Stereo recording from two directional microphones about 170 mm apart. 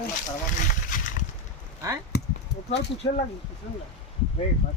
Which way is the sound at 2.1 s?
75° left (ahead or behind).